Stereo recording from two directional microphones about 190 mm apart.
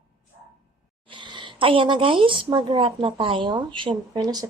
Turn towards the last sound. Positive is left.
turn(degrees=-25)  # may be behind; listen again after turning